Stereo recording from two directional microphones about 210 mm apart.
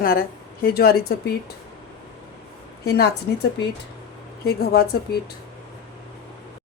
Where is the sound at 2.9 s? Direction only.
50° left (ahead or behind).